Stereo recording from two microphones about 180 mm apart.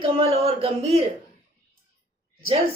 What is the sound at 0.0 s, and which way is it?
Speech, 35° right (ahead or behind).